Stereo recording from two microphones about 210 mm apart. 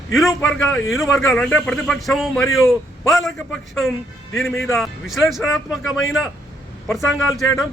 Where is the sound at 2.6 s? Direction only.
15° left (ahead or behind).